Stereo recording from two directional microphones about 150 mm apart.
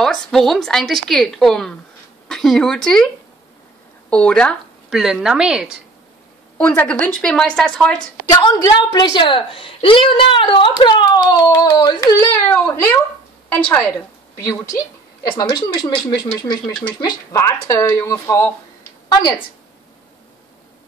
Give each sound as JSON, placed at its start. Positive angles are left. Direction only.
{"t": 0.0, "sound": "a woman's voice", "side_deg": 5}
{"t": 4.1, "sound": "speech", "side_deg": 5}
{"t": 4.9, "sound": "a woman's voice", "side_deg": -5}
{"t": 6.6, "sound": "a woman's voice", "side_deg": 10}
{"t": 8.3, "sound": "a woman's voice", "side_deg": 25}